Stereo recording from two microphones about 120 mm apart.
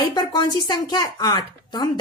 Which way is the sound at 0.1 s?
35° left (ahead or behind).